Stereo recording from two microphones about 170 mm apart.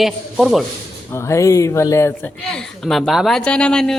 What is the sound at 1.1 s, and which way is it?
Speech, 15° left (ahead or behind).